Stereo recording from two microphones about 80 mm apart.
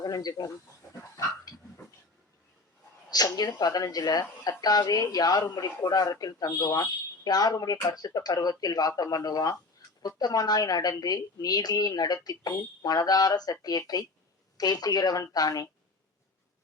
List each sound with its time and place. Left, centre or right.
0.0 s a sound: left
1.1 s dog: left
3.3 s a woman's voice: left